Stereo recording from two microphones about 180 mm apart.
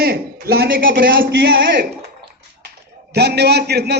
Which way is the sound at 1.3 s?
90° right.